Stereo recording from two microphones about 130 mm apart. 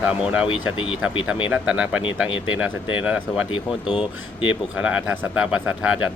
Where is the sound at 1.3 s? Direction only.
5° right (ahead or behind).